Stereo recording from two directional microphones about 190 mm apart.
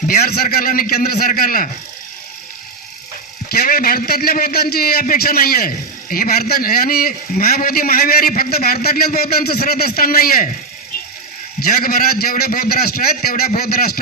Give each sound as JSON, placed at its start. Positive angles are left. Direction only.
{"t": 0.1, "sound": "a man's voice", "side_deg": 50}
{"t": 3.5, "sound": "a man's voice", "side_deg": 50}
{"t": 11.6, "sound": "a man's voice", "side_deg": 50}